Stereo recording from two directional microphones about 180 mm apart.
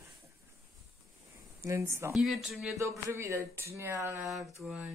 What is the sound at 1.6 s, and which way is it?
Speech, 15° right (ahead or behind).